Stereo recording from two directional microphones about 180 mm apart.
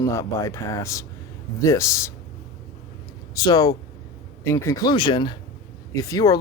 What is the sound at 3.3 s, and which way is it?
Speech, 20° left (ahead or behind).